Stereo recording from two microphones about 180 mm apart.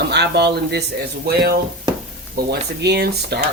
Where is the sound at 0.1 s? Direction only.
65° right (ahead or behind).